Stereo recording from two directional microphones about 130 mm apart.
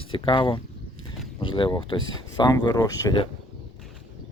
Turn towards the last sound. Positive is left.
turn(degrees=25)  # may be behind; listen again after turning